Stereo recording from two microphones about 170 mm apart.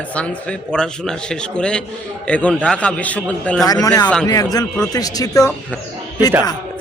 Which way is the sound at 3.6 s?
20° left (ahead or behind).